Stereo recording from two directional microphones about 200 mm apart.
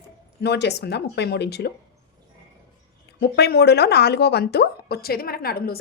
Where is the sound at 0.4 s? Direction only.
55° left (ahead or behind).